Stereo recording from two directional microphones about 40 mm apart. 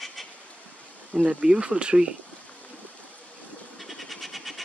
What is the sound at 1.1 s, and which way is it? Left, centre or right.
Speech, right.